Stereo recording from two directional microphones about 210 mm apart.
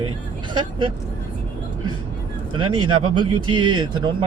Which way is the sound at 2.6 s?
20° right (ahead or behind).